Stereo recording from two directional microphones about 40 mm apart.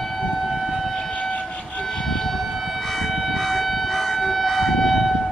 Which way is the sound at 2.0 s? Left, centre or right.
Centre.